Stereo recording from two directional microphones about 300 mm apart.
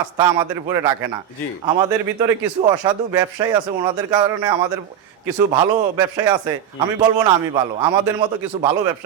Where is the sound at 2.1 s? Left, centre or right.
Centre.